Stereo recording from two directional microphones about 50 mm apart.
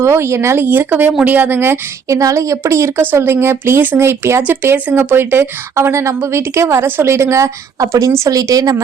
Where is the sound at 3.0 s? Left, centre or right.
Right.